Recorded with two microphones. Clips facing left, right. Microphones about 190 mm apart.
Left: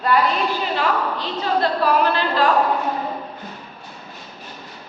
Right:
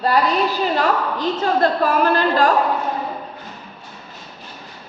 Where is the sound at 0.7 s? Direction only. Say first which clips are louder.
Right 2 dB; 45° right (ahead or behind).